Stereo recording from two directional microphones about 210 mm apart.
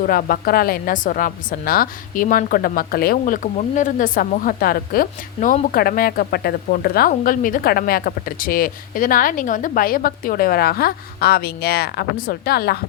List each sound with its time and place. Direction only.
0.0 s a woman's voice: 45° left (ahead or behind)